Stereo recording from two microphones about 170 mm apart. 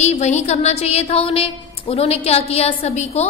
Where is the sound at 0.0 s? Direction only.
45° left (ahead or behind).